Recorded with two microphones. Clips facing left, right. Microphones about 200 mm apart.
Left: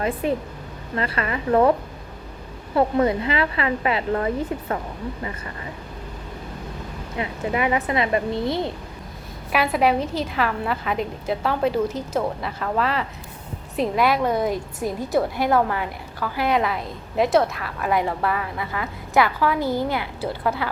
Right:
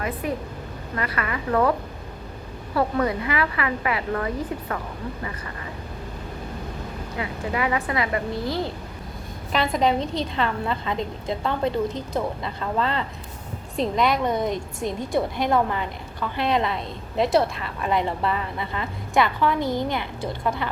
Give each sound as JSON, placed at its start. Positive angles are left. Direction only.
{"t": 0.0, "sound": "a woman's voice", "side_deg": 25}
{"t": 2.7, "sound": "a woman's voice", "side_deg": 25}
{"t": 7.2, "sound": "a woman's voice", "side_deg": 20}
{"t": 9.5, "sound": "a woman's voice", "side_deg": 10}
{"t": 13.7, "sound": "a woman's voice", "side_deg": 5}